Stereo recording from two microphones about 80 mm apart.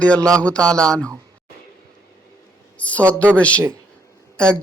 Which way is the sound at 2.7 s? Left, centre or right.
Centre.